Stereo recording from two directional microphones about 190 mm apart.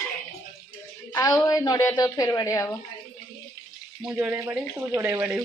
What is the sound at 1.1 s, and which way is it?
A woman's voice, 20° left (ahead or behind).